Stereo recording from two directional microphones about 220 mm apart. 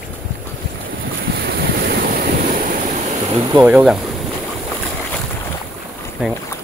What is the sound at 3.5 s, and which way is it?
Speech, 10° right (ahead or behind).